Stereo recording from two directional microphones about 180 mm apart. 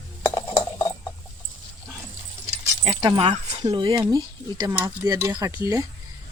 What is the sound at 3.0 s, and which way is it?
Speech, 25° right (ahead or behind).